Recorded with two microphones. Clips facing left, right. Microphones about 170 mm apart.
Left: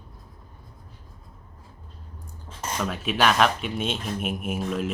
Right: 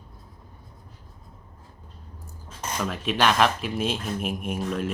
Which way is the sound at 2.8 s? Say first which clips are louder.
Even; 5° left (ahead or behind).